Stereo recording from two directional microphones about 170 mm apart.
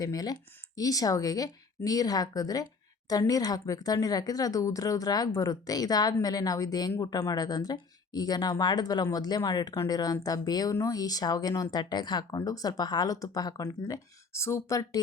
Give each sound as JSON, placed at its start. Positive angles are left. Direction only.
{"t": 0.0, "sound": "speech", "side_deg": 20}